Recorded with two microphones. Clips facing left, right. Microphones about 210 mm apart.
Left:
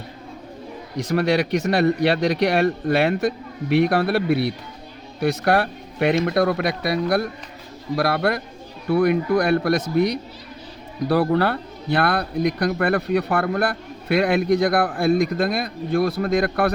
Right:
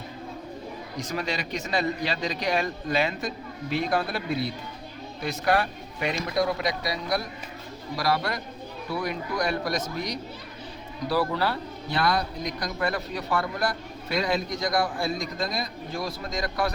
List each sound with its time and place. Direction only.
0.9 s a man's voice: 65° left (ahead or behind)